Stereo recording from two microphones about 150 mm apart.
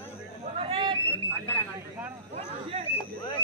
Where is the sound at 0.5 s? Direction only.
40° right (ahead or behind).